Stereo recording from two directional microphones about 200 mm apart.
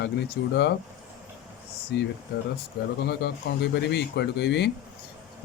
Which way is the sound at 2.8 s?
50° left (ahead or behind).